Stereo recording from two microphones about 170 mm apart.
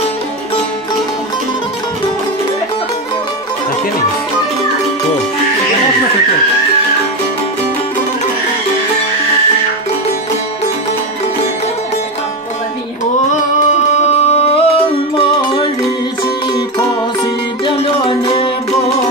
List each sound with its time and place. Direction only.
14.1 s music: 35° left (ahead or behind)
17.6 s music: 30° left (ahead or behind)